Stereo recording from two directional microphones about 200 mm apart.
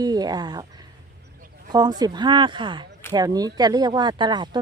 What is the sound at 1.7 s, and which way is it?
Speech, 20° right (ahead or behind).